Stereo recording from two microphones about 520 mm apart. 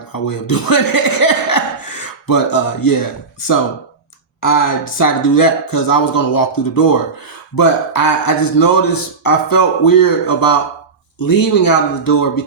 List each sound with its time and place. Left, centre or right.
0.1 s speech: left